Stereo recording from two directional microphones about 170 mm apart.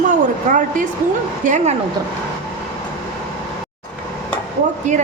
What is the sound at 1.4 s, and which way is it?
Speech, 45° right (ahead or behind).